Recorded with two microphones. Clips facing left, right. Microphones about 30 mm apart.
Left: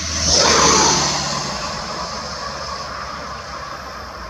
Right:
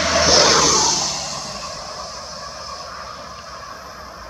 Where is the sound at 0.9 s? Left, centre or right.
Left.